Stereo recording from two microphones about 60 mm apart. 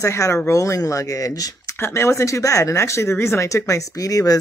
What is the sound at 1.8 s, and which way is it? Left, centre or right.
Speech, left.